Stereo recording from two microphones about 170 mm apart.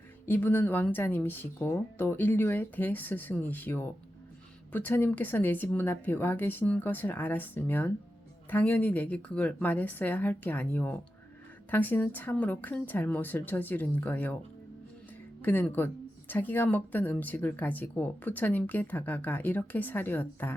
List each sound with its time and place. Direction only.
0.3 s speech: 10° left (ahead or behind)
15.4 s speech: 10° left (ahead or behind)